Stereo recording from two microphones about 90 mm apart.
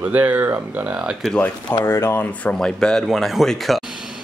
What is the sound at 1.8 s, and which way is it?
Speech, 30° left (ahead or behind).